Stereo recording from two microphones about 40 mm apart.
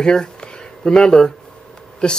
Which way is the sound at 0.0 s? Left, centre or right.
Centre.